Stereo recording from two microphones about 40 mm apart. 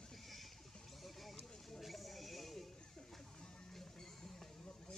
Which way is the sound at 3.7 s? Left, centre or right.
Centre.